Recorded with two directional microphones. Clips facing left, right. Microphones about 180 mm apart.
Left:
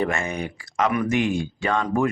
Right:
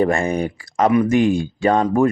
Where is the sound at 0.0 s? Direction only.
35° right (ahead or behind).